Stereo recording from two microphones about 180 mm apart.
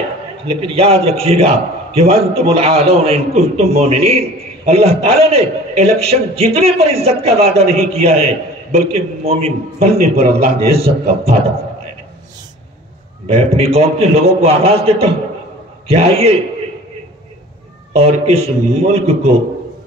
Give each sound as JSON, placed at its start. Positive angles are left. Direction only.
{"t": 0.5, "sound": "a man's voice", "side_deg": -35}
{"t": 13.3, "sound": "a man's voice", "side_deg": -35}
{"t": 17.9, "sound": "a man's voice", "side_deg": -35}